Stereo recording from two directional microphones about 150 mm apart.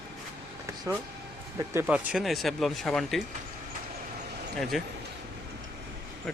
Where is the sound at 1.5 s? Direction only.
15° right (ahead or behind).